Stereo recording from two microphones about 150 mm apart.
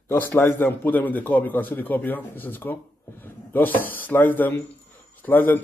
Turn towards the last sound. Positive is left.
turn(degrees=15)  # may be behind; listen again after turning